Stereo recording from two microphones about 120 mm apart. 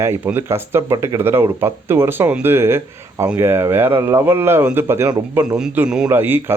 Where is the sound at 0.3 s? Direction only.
20° right (ahead or behind).